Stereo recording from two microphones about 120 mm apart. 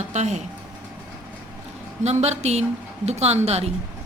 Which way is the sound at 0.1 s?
75° right (ahead or behind).